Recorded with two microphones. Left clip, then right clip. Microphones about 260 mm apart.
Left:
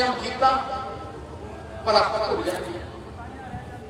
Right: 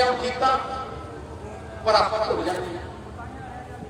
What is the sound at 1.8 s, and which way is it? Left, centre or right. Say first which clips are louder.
Speech: even; right.